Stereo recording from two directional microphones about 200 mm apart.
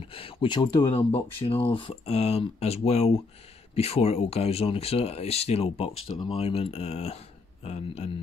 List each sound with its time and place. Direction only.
0.0 s speech: 25° left (ahead or behind)